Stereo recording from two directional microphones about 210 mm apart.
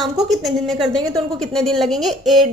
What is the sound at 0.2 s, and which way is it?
A woman's voice, centre (ahead or behind).